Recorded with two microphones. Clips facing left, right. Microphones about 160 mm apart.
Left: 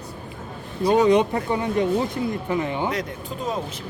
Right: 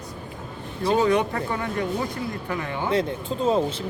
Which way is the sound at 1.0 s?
20° left (ahead or behind).